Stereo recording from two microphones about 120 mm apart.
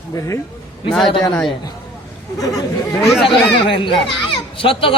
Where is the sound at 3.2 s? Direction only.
45° left (ahead or behind).